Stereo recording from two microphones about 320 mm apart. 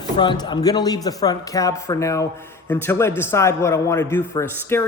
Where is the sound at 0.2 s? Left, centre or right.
Centre.